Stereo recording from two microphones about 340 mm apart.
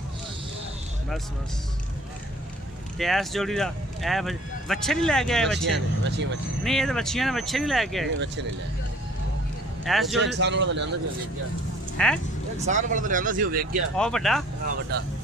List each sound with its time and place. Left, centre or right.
3.0 s speech: centre
5.7 s speech: right
6.6 s speech: centre
9.8 s speech: centre
10.2 s speech: right
12.0 s speech: centre
12.6 s speech: right
13.9 s speech: centre